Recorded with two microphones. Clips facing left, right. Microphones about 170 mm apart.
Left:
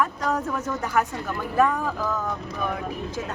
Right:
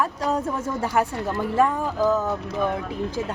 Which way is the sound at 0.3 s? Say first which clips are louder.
Right 1 dB; 30° right (ahead or behind).